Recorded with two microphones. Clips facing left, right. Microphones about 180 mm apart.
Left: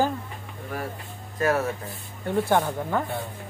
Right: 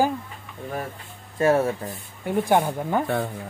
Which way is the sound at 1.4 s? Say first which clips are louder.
Right 4 dB; 30° right (ahead or behind).